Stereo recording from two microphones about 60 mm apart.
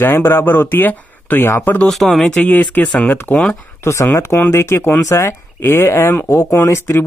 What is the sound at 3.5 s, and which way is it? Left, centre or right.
Speech, left.